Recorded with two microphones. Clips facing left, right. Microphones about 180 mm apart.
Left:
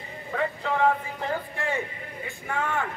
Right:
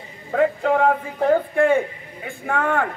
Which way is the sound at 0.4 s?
50° right (ahead or behind).